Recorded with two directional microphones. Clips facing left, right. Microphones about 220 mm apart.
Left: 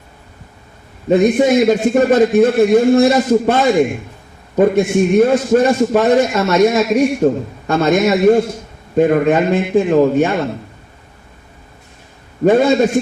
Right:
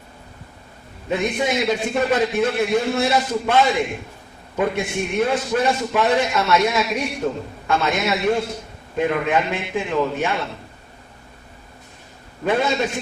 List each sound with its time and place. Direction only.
1.1 s a man's voice: 45° left (ahead or behind)
12.5 s a man's voice: 45° left (ahead or behind)